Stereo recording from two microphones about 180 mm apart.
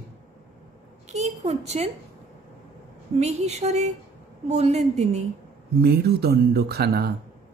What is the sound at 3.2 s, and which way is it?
A woman's voice, 40° right (ahead or behind).